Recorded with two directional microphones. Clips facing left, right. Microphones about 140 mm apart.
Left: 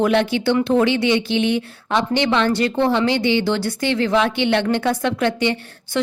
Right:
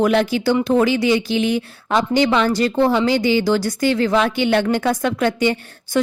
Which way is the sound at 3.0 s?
40° right (ahead or behind).